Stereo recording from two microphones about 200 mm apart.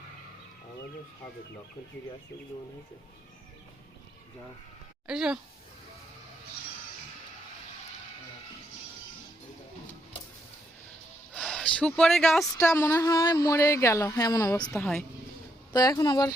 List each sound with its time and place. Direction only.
5.0 s speech: 5° right (ahead or behind)
11.3 s speech: 5° left (ahead or behind)
12.5 s speech: 15° left (ahead or behind)
14.7 s speech: 5° left (ahead or behind)
15.7 s speech: 20° left (ahead or behind)